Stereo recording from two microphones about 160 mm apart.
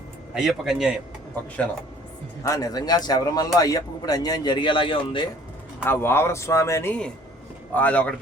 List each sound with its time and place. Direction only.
0.3 s a man's voice: centre (ahead or behind)
2.4 s a man's voice: 20° left (ahead or behind)
5.8 s speech: 15° left (ahead or behind)